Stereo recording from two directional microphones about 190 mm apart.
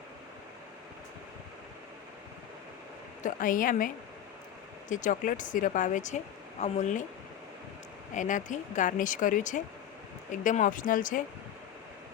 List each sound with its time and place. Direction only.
3.2 s speech: 45° left (ahead or behind)
8.1 s speech: 40° left (ahead or behind)